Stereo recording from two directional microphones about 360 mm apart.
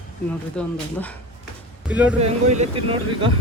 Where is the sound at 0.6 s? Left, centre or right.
Centre.